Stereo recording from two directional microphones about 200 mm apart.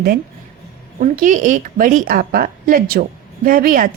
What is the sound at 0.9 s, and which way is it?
Speech, 40° right (ahead or behind).